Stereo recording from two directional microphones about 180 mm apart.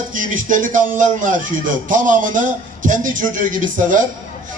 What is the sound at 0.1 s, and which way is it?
A man's voice, 45° right (ahead or behind).